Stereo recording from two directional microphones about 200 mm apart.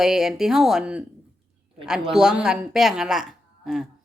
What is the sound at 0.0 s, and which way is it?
Speech, centre (ahead or behind).